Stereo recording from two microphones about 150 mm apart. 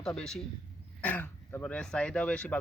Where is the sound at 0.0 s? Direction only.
5° left (ahead or behind).